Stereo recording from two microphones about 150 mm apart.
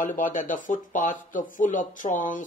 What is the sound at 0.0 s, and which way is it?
Speech, 60° left (ahead or behind).